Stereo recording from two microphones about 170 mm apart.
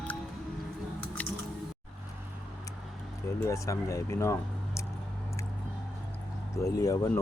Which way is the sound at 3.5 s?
20° left (ahead or behind).